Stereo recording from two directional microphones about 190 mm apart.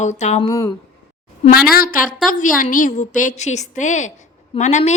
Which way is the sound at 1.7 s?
50° left (ahead or behind).